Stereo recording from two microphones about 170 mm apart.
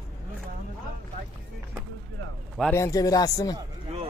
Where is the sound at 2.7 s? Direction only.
20° left (ahead or behind).